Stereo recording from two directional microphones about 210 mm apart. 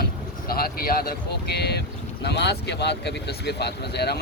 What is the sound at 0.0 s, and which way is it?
Speech, 45° left (ahead or behind).